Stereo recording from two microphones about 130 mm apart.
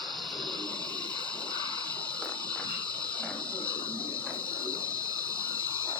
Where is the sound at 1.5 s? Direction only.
35° right (ahead or behind).